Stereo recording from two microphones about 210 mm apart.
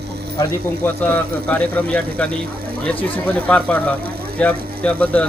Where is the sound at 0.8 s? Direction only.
10° left (ahead or behind).